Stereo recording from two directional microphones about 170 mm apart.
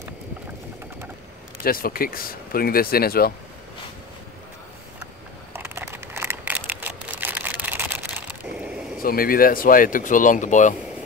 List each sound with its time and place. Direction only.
1.6 s speech: 60° left (ahead or behind)
5.5 s a sound: 15° right (ahead or behind)
9.0 s speech: 60° left (ahead or behind)